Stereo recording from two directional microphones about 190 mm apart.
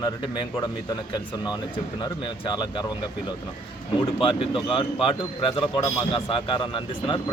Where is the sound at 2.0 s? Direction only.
25° left (ahead or behind).